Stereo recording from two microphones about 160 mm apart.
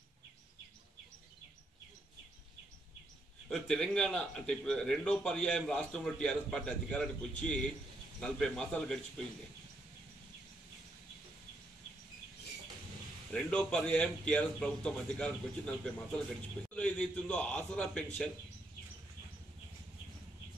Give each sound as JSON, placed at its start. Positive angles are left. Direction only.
{"t": 3.4, "sound": "a man's voice", "side_deg": 5}
{"t": 13.3, "sound": "a man's voice", "side_deg": 5}